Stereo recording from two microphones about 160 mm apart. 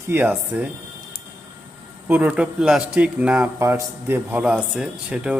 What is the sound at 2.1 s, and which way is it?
A man's voice, 10° right (ahead or behind).